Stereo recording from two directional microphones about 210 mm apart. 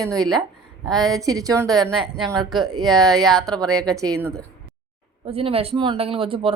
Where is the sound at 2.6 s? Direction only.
20° right (ahead or behind).